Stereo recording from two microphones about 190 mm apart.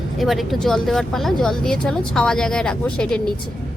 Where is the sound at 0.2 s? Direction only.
Centre (ahead or behind).